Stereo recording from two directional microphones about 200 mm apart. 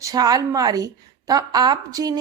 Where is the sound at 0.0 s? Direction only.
20° right (ahead or behind).